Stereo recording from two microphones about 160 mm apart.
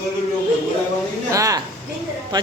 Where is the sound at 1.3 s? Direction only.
20° right (ahead or behind).